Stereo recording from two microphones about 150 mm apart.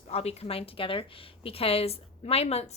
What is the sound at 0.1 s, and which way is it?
A woman's voice, 45° left (ahead or behind).